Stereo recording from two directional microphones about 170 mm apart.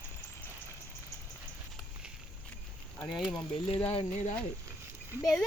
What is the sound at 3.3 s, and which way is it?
Speech, 30° left (ahead or behind).